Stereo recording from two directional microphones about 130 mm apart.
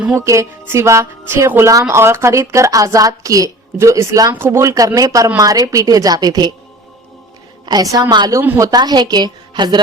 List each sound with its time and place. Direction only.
0.2 s a woman's voice: 20° right (ahead or behind)
7.6 s a woman's voice: 30° right (ahead or behind)
8.4 s a woman's voice: 20° right (ahead or behind)